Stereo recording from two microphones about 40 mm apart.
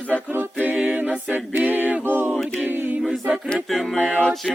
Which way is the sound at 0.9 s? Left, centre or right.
Right.